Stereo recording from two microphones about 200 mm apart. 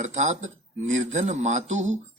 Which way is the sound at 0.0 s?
35° right (ahead or behind).